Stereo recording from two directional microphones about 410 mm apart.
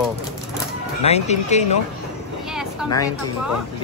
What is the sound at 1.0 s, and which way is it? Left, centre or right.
Speech, centre.